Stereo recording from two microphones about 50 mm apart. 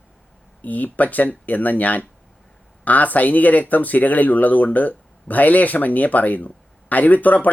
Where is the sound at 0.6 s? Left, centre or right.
Left.